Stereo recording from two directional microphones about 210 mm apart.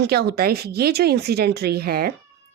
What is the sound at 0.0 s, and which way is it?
Speech, 50° right (ahead or behind).